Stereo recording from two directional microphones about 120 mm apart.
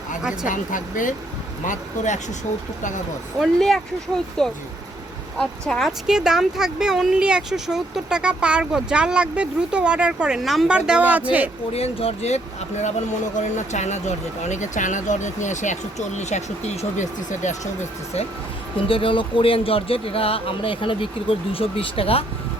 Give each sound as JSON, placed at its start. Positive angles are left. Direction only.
{"t": 0.4, "sound": "speech", "side_deg": 90}
{"t": 3.4, "sound": "speech", "side_deg": 0}
{"t": 11.7, "sound": "speech", "side_deg": 55}
{"t": 13.6, "sound": "speech", "side_deg": 75}
{"t": 14.4, "sound": "speech", "side_deg": 85}
{"t": 18.9, "sound": "speech", "side_deg": 45}